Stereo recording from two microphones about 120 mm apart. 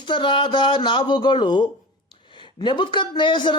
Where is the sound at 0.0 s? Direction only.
45° left (ahead or behind).